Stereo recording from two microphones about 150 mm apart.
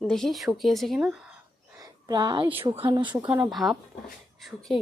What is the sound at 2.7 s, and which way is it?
Speech, 35° right (ahead or behind).